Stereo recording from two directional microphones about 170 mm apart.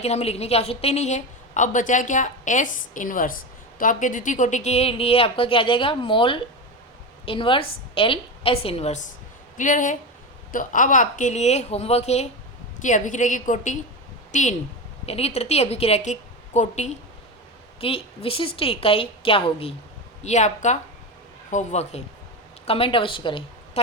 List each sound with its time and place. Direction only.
0.0 s a woman's voice: 40° left (ahead or behind)
9.6 s a woman's voice: 50° left (ahead or behind); by 23.8 s 30° left (ahead or behind)